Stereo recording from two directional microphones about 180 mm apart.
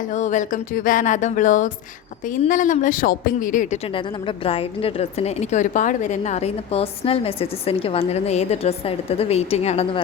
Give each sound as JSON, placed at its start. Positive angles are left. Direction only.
{"t": 0.1, "sound": "speech", "side_deg": 40}
{"t": 3.9, "sound": "a woman's voice", "side_deg": 30}